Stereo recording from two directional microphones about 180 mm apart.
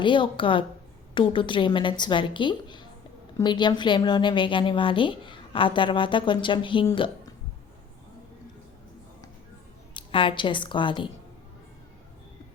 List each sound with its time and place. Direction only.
0.0 s a woman's voice: 25° left (ahead or behind)
9.9 s a woman's voice: 30° left (ahead or behind)